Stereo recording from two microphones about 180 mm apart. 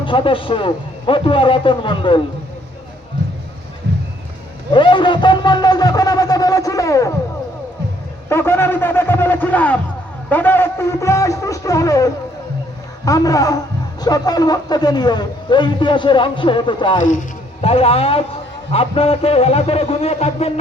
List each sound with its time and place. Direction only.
0.0 s a man's voice: 30° left (ahead or behind)
4.7 s a man's voice: 25° left (ahead or behind)
8.3 s a man's voice: 15° left (ahead or behind)
17.0 s a man's voice: 45° left (ahead or behind)
17.6 s a man's voice: 35° left (ahead or behind)